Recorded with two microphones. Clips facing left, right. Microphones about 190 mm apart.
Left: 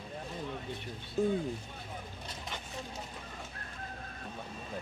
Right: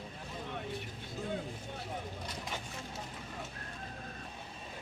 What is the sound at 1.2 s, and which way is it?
Speech, 50° left (ahead or behind).